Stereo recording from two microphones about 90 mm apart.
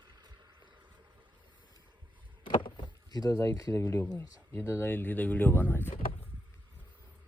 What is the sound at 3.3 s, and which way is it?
Speech, 35° left (ahead or behind).